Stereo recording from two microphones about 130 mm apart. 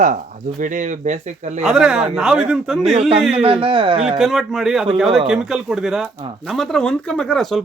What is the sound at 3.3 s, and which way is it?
Speech, 45° right (ahead or behind).